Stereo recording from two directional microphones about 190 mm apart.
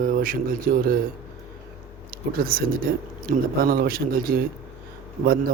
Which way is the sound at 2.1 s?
50° right (ahead or behind).